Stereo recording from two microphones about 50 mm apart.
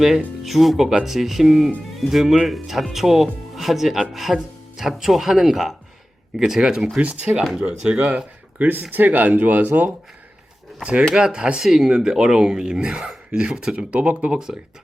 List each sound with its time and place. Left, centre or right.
0.4 s speech: centre
7.0 s speech: right
11.1 s speech: centre